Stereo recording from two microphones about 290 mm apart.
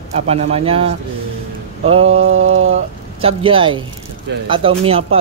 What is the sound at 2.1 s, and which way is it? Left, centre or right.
Mantra, right.